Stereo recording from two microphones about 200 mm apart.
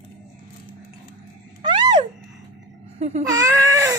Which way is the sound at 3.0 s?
35° right (ahead or behind).